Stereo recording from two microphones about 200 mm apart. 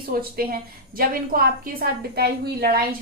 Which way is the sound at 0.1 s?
50° right (ahead or behind).